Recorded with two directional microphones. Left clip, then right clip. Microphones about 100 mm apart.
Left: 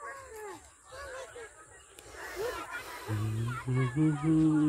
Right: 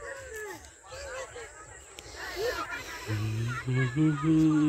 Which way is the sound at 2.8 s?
40° left (ahead or behind).